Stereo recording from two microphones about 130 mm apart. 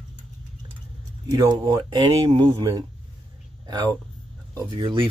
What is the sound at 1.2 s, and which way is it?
Speech, 30° right (ahead or behind).